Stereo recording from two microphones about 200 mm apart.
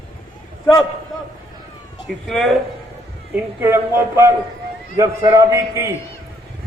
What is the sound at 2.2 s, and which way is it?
Speech, centre (ahead or behind).